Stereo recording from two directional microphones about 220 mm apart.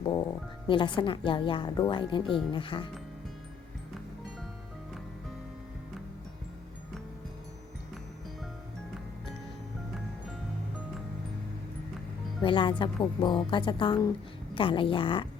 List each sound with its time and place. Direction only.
0.0 s speech: 20° left (ahead or behind)
12.4 s speech: 20° left (ahead or behind)